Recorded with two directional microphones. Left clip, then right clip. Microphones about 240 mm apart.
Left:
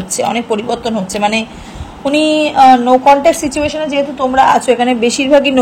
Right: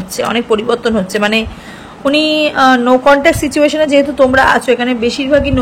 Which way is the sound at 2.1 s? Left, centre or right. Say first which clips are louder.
Even; centre.